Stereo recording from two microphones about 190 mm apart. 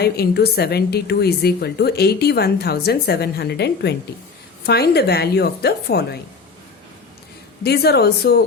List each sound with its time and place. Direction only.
0.0 s a woman's voice: 55° left (ahead or behind)
7.6 s a woman's voice: 60° left (ahead or behind)